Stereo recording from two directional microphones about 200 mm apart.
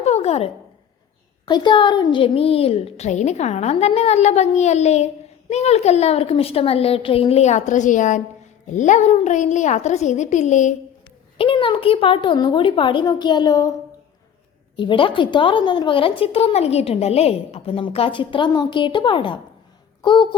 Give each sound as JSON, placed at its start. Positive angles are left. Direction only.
{"t": 0.0, "sound": "a sound", "side_deg": 30}
{"t": 1.5, "sound": "a woman's voice", "side_deg": 20}
{"t": 11.3, "sound": "speech", "side_deg": 25}
{"t": 14.8, "sound": "speech", "side_deg": 25}